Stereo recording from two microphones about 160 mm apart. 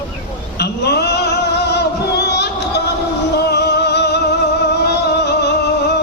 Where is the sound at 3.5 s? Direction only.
90° left.